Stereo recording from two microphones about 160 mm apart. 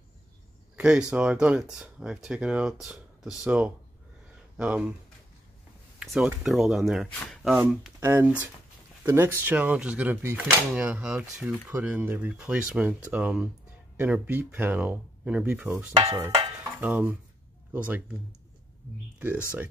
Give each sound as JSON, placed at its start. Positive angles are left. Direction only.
{"t": 0.7, "sound": "speech", "side_deg": -5}
{"t": 5.9, "sound": "speech", "side_deg": -5}
{"t": 8.0, "sound": "speech", "side_deg": -15}
{"t": 16.1, "sound": "percussion", "side_deg": -20}
{"t": 16.8, "sound": "speech", "side_deg": -10}